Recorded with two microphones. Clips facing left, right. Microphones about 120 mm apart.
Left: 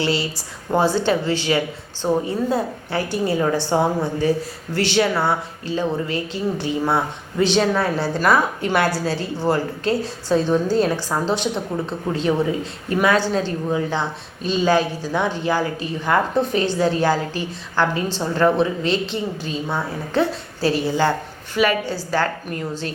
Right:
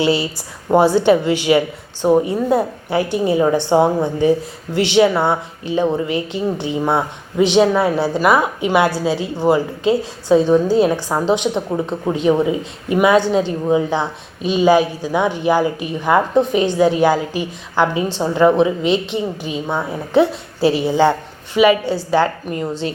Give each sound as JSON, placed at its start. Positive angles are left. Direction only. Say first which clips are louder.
{"t": 0.0, "sound": "a woman's voice", "louder": "right 5 dB", "side_deg": -15}
{"t": 9.9, "sound": "a woman's voice", "louder": "right 6 dB", "side_deg": -20}
{"t": 10.5, "sound": "a woman's voice", "louder": "right 5 dB", "side_deg": -5}
{"t": 10.9, "sound": "a woman's voice", "louder": "right 4 dB", "side_deg": -20}
{"t": 21.5, "sound": "a woman's voice", "louder": "right 6 dB", "side_deg": -5}
{"t": 21.8, "sound": "a woman's voice", "louder": "right 6 dB", "side_deg": -25}